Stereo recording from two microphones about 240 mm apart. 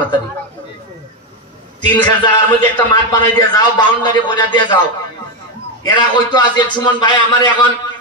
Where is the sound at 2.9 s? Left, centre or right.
Centre.